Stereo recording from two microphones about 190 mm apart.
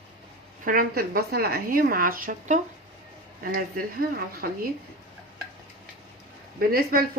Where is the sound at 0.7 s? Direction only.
50° right (ahead or behind).